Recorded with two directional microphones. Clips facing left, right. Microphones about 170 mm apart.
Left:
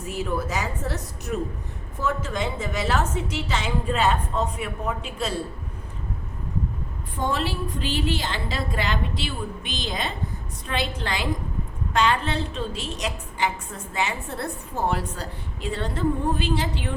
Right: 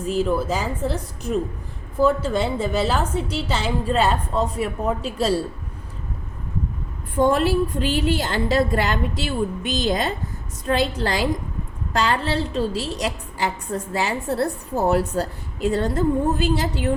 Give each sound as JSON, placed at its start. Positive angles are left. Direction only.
{"t": 0.1, "sound": "a woman's voice", "side_deg": -30}
{"t": 7.3, "sound": "a woman's voice", "side_deg": -50}